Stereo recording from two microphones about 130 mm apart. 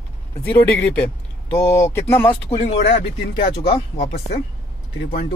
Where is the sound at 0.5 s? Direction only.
15° left (ahead or behind).